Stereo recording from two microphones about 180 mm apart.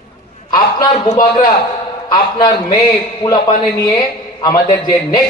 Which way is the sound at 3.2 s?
20° left (ahead or behind).